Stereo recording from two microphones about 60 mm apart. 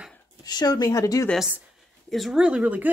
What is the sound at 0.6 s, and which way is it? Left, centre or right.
Speech, left.